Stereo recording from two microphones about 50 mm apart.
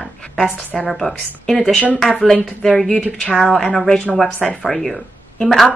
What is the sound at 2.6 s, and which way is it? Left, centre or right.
A woman's voice, centre.